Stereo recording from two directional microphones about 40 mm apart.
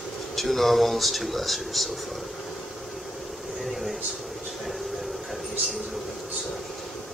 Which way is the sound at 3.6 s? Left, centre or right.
Centre.